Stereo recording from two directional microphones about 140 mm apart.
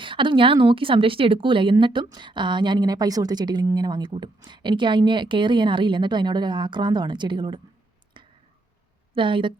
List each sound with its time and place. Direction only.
0.0 s a woman's voice: 35° right (ahead or behind)
8.1 s a sound: 35° right (ahead or behind)
9.1 s a woman's voice: 35° right (ahead or behind)